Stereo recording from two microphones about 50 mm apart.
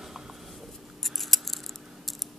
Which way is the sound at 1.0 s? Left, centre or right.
Centre.